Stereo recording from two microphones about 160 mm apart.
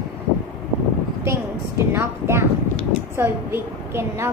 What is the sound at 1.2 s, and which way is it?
A woman's voice, 15° right (ahead or behind).